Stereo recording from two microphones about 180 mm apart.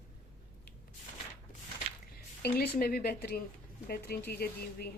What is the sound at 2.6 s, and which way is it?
Speech, 55° left (ahead or behind).